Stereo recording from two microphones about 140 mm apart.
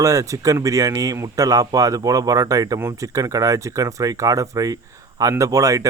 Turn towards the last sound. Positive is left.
turn(degrees=-25)  # may be behind; listen again after turning